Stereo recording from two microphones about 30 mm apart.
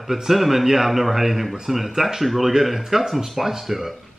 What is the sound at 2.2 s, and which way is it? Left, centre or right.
A man's voice, centre.